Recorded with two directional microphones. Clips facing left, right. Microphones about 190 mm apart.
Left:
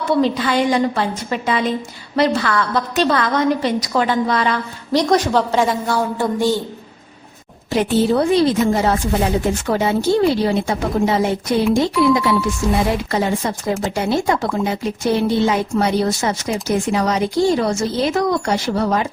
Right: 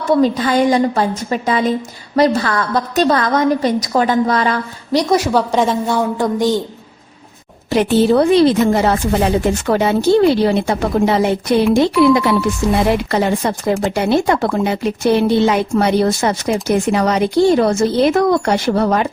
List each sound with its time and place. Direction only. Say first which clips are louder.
0.2 s a woman's voice: right 3 dB; 40° right (ahead or behind)
4.9 s a woman's voice: right 1 dB; 10° right (ahead or behind)
7.7 s a woman's voice: right 4 dB; 70° right (ahead or behind)